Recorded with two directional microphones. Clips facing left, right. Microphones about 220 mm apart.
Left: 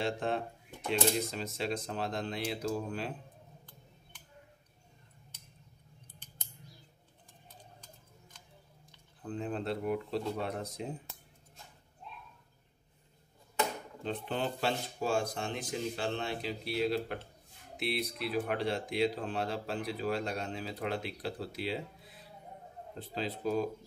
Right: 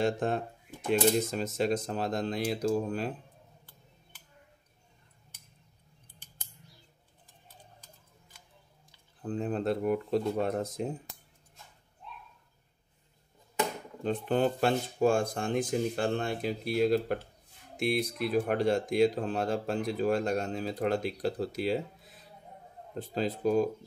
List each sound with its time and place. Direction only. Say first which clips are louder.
0.0 s speech: right 4 dB; 45° right (ahead or behind)
9.2 s speech: right 5 dB; 40° right (ahead or behind)
14.0 s speech: right 8 dB; 45° right (ahead or behind)